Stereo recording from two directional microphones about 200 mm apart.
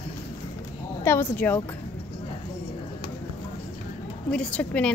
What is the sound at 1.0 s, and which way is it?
Speech, 10° left (ahead or behind).